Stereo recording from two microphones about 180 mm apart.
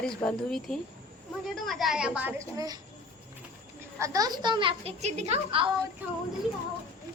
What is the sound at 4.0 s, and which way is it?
A child's voice, 20° right (ahead or behind).